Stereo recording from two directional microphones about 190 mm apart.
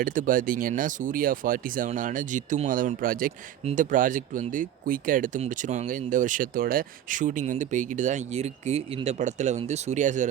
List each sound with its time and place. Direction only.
0.0 s speech: 45° right (ahead or behind)
3.6 s speech: 35° right (ahead or behind)